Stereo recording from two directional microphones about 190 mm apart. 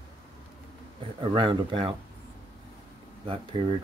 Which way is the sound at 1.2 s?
25° right (ahead or behind).